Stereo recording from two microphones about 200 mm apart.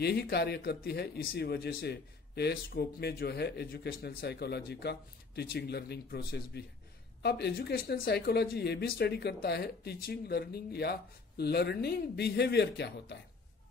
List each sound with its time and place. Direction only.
0.0 s speech: 55° left (ahead or behind)